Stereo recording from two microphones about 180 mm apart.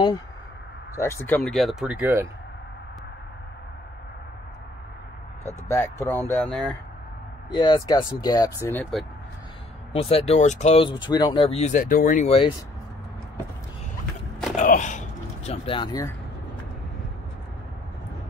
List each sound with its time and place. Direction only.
0.9 s speech: 15° left (ahead or behind); by 2.2 s 10° right (ahead or behind)
5.7 s speech: 15° left (ahead or behind)
7.5 s speech: 25° left (ahead or behind)
9.9 s speech: 35° left (ahead or behind)
12.3 s speech: 30° left (ahead or behind)
14.6 s a sound: 45° left (ahead or behind); by 16.1 s 25° left (ahead or behind)